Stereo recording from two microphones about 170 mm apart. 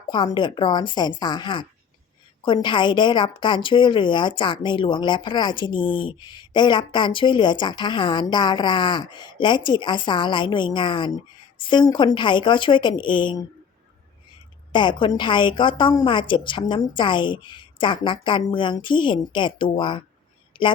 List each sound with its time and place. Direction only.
0.1 s a woman's voice: 25° left (ahead or behind)
14.7 s a woman's voice: 25° left (ahead or behind)
20.5 s a sound: 30° left (ahead or behind)